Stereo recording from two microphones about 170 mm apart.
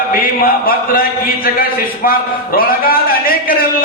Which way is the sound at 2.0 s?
60° left (ahead or behind).